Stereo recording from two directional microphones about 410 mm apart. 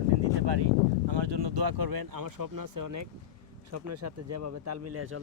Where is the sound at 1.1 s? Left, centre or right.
Right.